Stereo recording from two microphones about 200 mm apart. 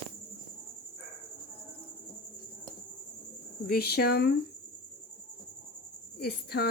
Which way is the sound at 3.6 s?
50° left (ahead or behind).